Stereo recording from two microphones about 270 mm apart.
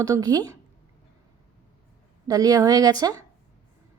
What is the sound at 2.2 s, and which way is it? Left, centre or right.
A woman's voice, centre.